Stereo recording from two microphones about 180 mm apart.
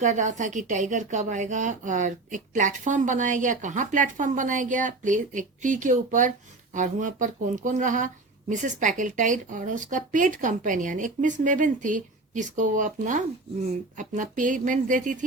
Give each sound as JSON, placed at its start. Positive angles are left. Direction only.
{"t": 0.0, "sound": "speech", "side_deg": -45}